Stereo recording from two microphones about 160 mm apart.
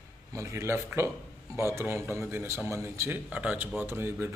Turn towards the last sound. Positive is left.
turn(degrees=-15)  # may be behind; listen again after turning